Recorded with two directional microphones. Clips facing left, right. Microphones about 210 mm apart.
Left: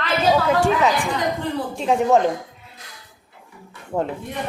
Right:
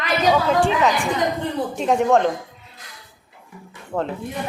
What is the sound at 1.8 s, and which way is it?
Speech, centre (ahead or behind).